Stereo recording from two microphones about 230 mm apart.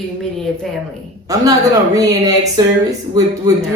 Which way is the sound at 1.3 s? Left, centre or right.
Centre.